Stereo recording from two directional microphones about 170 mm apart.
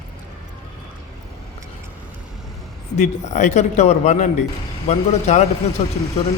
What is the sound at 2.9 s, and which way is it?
A man's voice, 45° left (ahead or behind).